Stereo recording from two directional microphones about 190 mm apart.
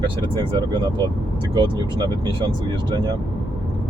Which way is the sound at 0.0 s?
25° right (ahead or behind).